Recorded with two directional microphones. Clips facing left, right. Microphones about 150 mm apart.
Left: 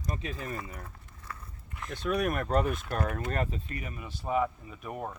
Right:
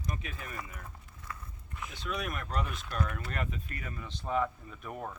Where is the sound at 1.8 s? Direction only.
55° left (ahead or behind).